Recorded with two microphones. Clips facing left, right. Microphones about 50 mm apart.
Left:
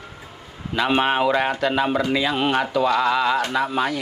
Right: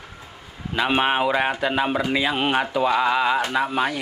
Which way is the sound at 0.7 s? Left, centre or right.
Centre.